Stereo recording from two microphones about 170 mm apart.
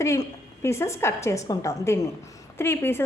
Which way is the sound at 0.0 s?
15° left (ahead or behind).